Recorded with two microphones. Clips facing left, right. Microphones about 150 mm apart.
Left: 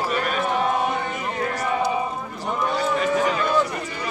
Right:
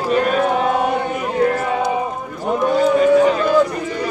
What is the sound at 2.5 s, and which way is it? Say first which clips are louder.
Cattle: right 8 dB; 45° right (ahead or behind).